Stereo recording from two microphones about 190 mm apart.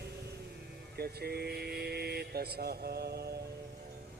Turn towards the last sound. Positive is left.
turn(degrees=-55)  # may be behind; listen again after turning